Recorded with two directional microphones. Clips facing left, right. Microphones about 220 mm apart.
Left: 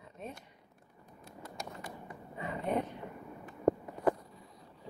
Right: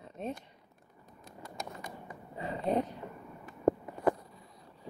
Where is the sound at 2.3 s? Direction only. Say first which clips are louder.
Right 3 dB; 30° right (ahead or behind).